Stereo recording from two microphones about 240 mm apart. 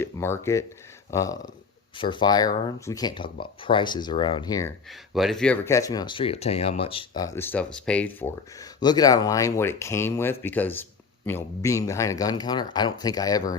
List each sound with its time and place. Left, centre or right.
0.0 s speech: centre
5.1 s speech: centre
8.8 s speech: centre